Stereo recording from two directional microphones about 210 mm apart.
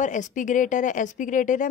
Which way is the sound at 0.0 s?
35° left (ahead or behind).